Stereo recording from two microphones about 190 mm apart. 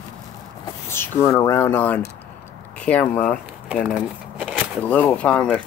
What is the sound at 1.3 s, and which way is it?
Speech, 15° left (ahead or behind).